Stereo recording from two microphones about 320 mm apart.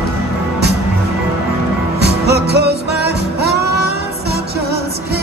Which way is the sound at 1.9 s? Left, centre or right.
Right.